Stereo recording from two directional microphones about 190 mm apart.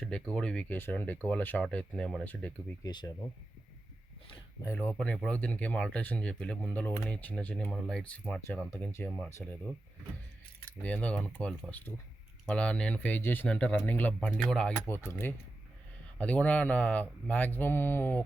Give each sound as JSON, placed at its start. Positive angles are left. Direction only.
{"t": 0.0, "sound": "speech", "side_deg": 5}
{"t": 2.8, "sound": "speech", "side_deg": 20}
{"t": 4.6, "sound": "speech", "side_deg": 10}
{"t": 9.1, "sound": "speech", "side_deg": 0}
{"t": 10.8, "sound": "speech", "side_deg": 5}